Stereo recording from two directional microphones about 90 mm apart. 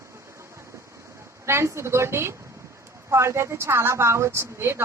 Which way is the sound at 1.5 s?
30° right (ahead or behind).